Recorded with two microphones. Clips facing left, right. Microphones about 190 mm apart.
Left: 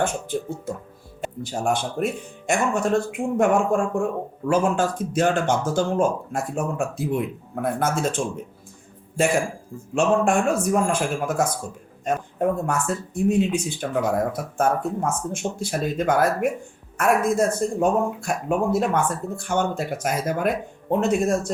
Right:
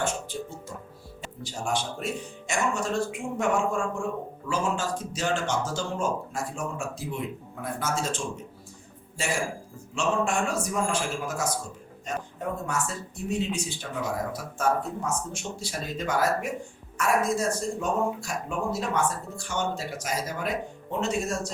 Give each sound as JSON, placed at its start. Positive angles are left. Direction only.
{"t": 0.0, "sound": "speech", "side_deg": 55}